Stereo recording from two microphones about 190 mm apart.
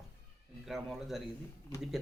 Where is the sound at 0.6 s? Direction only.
Centre (ahead or behind).